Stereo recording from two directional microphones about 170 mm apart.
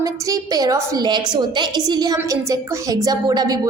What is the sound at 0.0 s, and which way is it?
A woman's voice, 20° right (ahead or behind).